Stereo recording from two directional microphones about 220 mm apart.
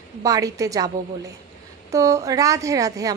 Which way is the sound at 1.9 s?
15° right (ahead or behind).